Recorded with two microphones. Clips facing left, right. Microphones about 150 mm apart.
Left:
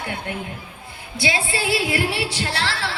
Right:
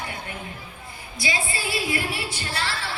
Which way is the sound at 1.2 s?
70° left (ahead or behind).